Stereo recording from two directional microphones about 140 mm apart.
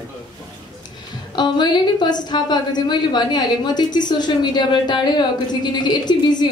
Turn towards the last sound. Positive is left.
turn(degrees=30)  # may be behind; listen again after turning